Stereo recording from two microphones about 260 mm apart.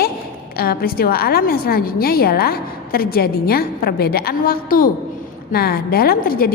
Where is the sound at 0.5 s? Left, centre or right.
Left.